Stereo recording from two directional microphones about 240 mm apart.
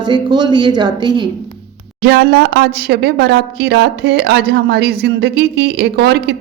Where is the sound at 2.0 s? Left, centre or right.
Right.